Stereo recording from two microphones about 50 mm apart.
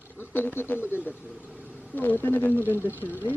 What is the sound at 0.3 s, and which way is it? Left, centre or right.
Speech, left.